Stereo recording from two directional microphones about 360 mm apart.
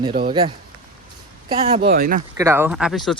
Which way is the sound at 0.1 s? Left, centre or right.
Centre.